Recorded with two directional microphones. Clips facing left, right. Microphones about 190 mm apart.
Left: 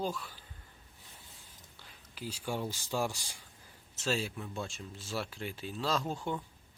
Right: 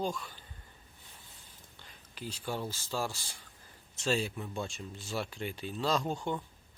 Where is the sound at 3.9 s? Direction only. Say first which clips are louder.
Right 2 dB; centre (ahead or behind).